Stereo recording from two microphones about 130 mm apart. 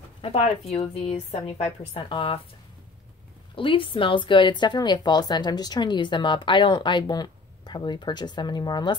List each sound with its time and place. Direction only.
0.2 s a woman's voice: 50° left (ahead or behind)
3.5 s speech: 40° left (ahead or behind)